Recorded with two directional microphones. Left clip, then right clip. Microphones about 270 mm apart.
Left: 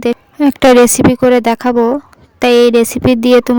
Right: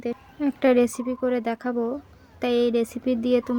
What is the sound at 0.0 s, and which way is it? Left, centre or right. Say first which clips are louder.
Speech: left 15 dB; left.